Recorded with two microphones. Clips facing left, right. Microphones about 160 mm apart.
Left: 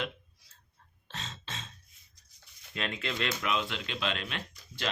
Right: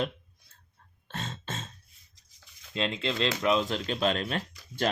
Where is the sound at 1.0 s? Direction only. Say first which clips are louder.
Right 6 dB; 55° right (ahead or behind).